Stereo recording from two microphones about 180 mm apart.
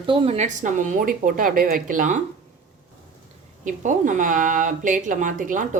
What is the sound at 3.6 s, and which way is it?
Speech, 45° right (ahead or behind).